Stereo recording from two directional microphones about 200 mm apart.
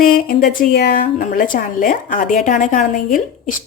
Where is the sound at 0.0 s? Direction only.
45° left (ahead or behind).